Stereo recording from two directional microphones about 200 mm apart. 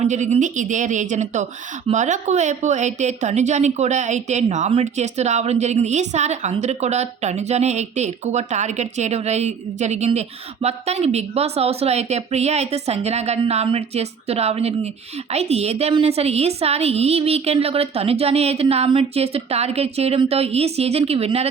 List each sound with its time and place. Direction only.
0.0 s a woman's voice: 35° right (ahead or behind)